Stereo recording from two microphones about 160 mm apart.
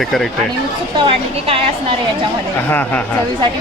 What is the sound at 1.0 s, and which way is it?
Speech, 35° right (ahead or behind).